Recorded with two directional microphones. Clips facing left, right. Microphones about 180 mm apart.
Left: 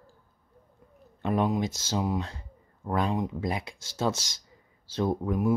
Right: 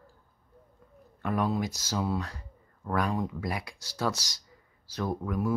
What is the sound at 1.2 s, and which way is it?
Speech, 20° left (ahead or behind).